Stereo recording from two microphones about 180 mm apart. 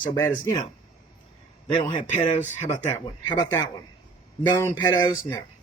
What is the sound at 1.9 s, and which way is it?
Speech, 40° left (ahead or behind).